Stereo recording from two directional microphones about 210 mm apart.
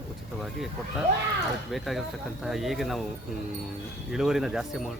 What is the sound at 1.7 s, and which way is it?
Speech, centre (ahead or behind).